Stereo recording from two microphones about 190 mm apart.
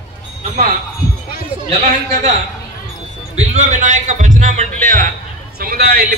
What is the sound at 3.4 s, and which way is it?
A man's voice, 35° right (ahead or behind).